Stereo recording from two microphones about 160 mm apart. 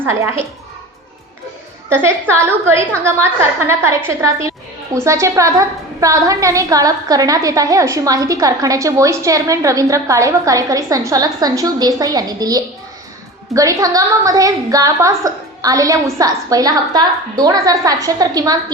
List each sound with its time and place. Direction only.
0.0 s a woman's voice: 15° right (ahead or behind)
2.3 s a woman's voice: 15° right (ahead or behind)